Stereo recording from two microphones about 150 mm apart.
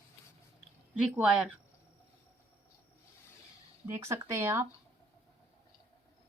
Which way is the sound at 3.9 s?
20° right (ahead or behind).